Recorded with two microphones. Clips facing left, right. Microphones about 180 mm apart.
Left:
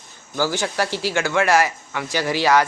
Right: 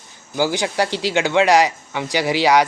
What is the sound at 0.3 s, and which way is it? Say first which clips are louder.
Speech: right 3 dB; 15° right (ahead or behind).